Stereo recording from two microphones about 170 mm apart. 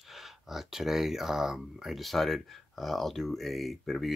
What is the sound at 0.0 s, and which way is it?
Speech, centre (ahead or behind).